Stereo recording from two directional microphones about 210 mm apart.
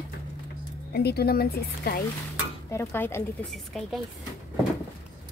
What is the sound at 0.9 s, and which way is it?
A woman's voice, 50° left (ahead or behind).